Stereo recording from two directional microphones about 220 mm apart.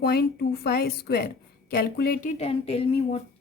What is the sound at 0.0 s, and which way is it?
A woman's voice, 45° left (ahead or behind).